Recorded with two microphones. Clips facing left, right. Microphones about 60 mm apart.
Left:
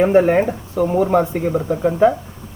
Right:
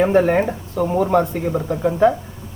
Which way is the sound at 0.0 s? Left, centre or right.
Centre.